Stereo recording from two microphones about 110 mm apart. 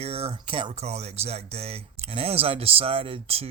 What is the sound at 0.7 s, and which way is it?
Speech, 75° right (ahead or behind).